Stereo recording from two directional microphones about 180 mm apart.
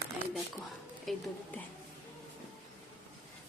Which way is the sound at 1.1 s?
Centre (ahead or behind).